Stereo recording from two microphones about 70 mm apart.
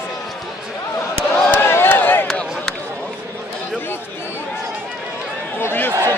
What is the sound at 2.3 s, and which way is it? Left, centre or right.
Run, centre.